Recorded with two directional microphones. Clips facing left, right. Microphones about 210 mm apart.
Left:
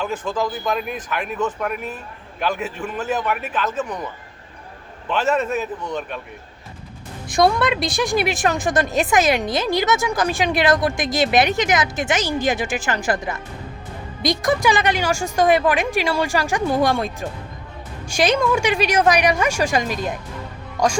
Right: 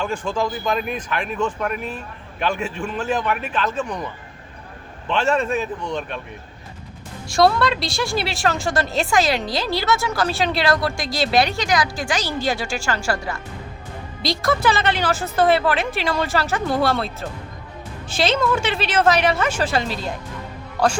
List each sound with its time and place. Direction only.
0.0 s a man's voice: 5° left (ahead or behind)
7.3 s a woman's voice: 20° left (ahead or behind)